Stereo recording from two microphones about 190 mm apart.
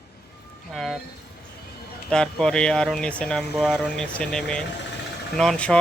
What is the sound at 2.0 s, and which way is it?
Speech, 5° left (ahead or behind).